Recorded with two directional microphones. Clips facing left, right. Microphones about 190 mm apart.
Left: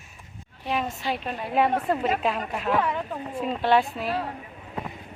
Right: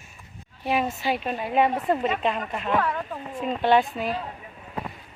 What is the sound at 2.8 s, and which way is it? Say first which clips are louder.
Speech: even; 15° left (ahead or behind).